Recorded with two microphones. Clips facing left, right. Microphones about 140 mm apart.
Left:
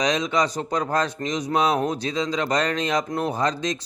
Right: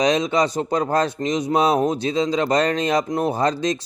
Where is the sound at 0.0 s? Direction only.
30° right (ahead or behind).